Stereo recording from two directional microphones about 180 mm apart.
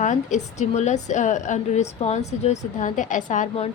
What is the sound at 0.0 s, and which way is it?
A woman's voice, 40° left (ahead or behind).